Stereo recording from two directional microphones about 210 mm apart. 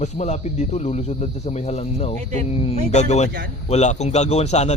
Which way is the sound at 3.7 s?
35° left (ahead or behind).